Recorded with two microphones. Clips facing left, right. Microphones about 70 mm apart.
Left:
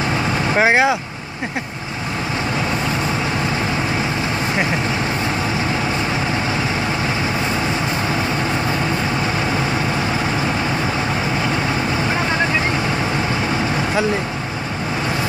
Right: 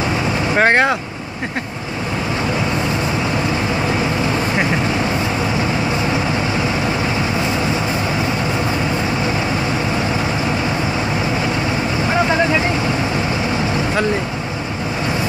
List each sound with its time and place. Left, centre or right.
0.6 s speech: centre